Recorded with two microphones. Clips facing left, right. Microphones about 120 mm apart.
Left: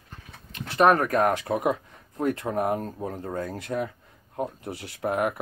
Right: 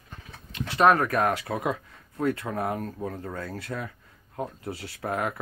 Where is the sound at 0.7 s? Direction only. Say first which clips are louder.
Left 1 dB; 30° left (ahead or behind).